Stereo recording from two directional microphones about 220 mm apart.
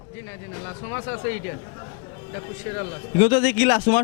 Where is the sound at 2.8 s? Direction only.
10° left (ahead or behind).